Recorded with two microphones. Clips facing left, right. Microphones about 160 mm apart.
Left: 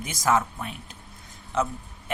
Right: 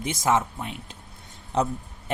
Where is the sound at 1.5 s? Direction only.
35° right (ahead or behind).